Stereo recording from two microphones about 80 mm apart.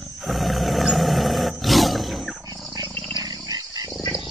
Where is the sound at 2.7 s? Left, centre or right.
Right.